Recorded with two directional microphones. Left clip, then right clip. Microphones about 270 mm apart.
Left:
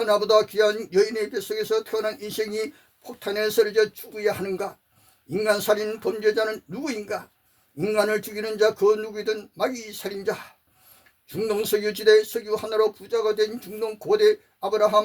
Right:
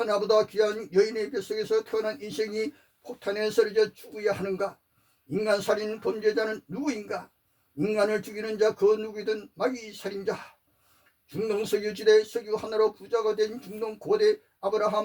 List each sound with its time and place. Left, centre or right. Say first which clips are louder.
0.0 s speech: left 4 dB; left
11.3 s speech: left 4 dB; left